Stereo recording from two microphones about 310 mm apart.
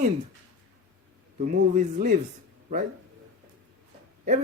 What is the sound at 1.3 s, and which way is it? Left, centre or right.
Speech, right.